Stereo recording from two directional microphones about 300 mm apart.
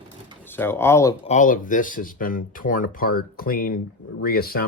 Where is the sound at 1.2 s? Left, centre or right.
Left.